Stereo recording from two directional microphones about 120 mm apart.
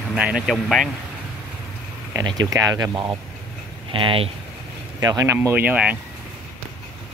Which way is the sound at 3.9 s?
45° right (ahead or behind).